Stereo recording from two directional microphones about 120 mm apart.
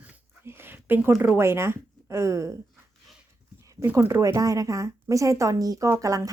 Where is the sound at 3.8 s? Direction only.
20° right (ahead or behind).